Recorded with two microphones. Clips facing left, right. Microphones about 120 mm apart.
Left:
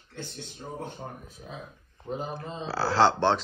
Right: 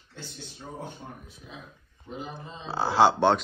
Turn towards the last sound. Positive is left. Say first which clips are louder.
# right 1 dB
turn(degrees=-15)  # may be behind; listen again after turning